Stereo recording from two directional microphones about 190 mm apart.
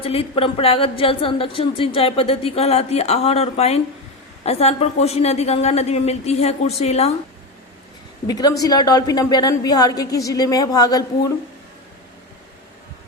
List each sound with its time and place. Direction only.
0.0 s a woman's voice: 30° left (ahead or behind)
8.3 s a woman's voice: 20° left (ahead or behind)